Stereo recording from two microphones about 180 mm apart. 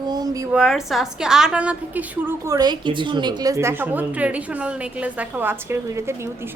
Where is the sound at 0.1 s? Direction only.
20° right (ahead or behind).